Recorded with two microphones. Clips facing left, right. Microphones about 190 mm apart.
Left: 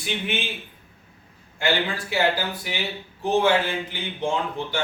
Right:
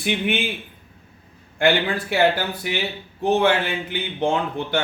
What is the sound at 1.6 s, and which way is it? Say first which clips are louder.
Speech: right 5 dB; 60° right (ahead or behind).